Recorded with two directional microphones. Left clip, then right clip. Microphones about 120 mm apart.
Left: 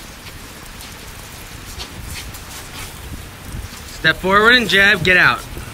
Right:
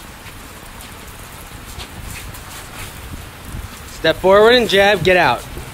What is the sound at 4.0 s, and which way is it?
Speech, 15° right (ahead or behind).